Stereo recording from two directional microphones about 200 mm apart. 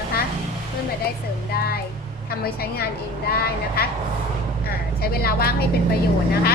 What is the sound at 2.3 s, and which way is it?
A woman's voice, 50° left (ahead or behind).